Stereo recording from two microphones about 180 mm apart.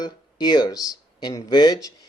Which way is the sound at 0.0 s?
25° left (ahead or behind).